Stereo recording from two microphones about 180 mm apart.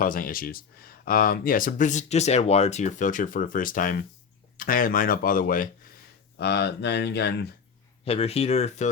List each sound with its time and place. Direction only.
0.0 s speech: 50° left (ahead or behind)
6.4 s speech: 70° left (ahead or behind)
8.0 s speech: 35° left (ahead or behind)